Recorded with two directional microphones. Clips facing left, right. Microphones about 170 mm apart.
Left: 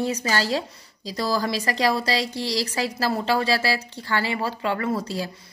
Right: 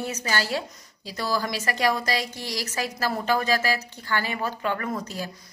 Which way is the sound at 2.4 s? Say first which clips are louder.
Left 6 dB; 10° right (ahead or behind).